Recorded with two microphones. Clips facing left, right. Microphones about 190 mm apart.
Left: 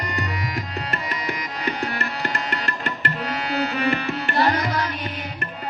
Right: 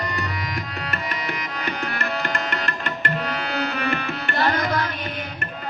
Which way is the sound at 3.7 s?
30° left (ahead or behind).